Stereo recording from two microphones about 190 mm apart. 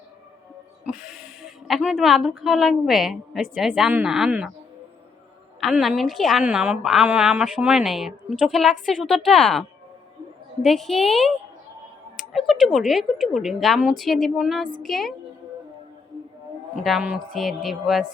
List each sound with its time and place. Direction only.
0.9 s a woman's voice: centre (ahead or behind)
5.5 s a woman's voice: centre (ahead or behind)
16.7 s a woman's voice: centre (ahead or behind)